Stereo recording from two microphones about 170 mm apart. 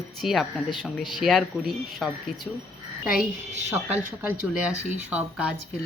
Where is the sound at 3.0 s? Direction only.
55° left (ahead or behind).